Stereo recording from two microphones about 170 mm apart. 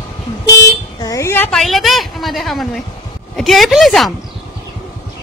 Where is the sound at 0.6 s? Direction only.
20° left (ahead or behind).